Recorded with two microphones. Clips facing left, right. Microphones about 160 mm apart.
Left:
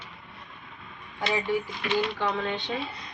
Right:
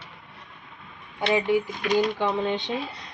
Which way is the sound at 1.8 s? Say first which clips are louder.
Right 4 dB; centre (ahead or behind).